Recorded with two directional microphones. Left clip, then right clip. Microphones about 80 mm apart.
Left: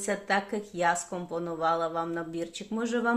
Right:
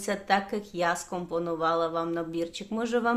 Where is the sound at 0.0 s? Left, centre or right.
Centre.